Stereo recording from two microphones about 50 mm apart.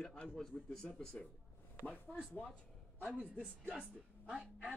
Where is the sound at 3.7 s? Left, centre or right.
Centre.